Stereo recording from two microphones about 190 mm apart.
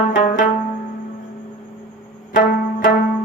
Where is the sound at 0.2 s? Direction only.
45° left (ahead or behind).